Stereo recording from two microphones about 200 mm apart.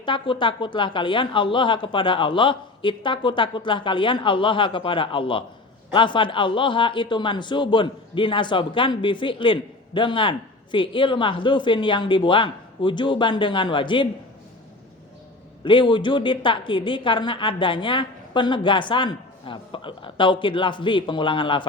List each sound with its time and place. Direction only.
0.0 s a man's voice: 25° left (ahead or behind)
15.6 s a man's voice: 25° left (ahead or behind)